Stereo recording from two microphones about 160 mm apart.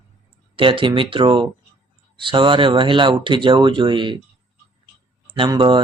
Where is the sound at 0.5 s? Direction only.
35° right (ahead or behind).